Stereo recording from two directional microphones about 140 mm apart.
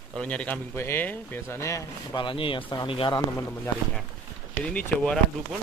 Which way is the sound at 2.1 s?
35° left (ahead or behind).